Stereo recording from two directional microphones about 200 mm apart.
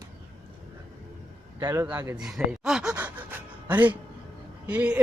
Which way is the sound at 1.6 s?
15° right (ahead or behind).